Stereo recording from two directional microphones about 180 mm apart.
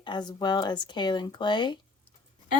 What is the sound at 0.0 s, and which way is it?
Speech, 25° left (ahead or behind).